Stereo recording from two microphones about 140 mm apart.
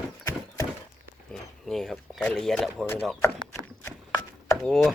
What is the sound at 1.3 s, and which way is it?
Speech, 5° left (ahead or behind).